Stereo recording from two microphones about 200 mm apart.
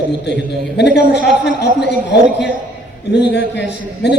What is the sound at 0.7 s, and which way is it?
A man's voice, 55° left (ahead or behind).